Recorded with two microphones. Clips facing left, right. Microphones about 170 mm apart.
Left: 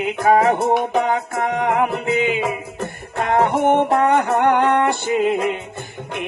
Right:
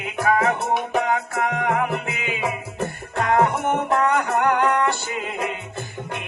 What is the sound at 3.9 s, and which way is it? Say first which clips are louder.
Music: left 4 dB; 30° left (ahead or behind).